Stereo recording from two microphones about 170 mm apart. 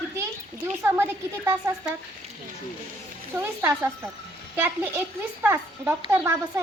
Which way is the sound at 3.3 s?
10° right (ahead or behind).